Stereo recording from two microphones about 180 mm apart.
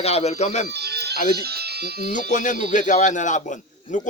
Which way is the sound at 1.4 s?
60° right (ahead or behind).